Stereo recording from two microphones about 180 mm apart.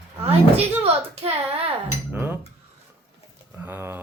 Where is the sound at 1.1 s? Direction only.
35° right (ahead or behind).